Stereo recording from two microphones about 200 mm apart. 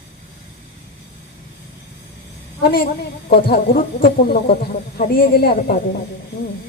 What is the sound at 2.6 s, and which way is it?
Speech, 50° left (ahead or behind).